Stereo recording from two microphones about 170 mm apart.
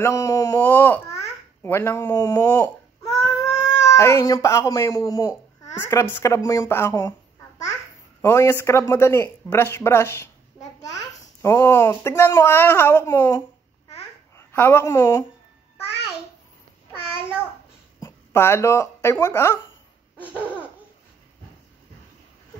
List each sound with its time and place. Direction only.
0.0 s a child's voice: 15° left (ahead or behind)
18.0 s speech: 15° left (ahead or behind)